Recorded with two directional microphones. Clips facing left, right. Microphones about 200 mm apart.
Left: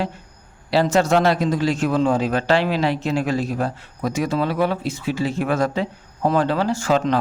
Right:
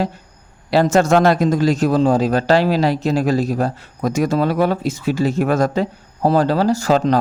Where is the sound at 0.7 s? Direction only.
45° right (ahead or behind).